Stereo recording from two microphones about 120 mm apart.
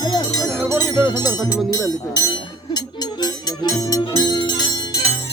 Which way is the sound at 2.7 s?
35° left (ahead or behind).